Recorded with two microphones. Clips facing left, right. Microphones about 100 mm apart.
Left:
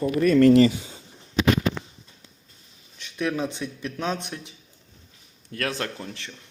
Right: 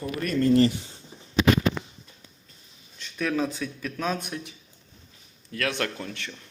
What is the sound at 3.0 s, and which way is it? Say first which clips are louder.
Speech: even; 20° left (ahead or behind).